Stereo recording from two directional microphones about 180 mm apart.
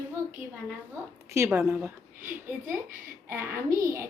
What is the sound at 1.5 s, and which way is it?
A woman's voice, 10° right (ahead or behind).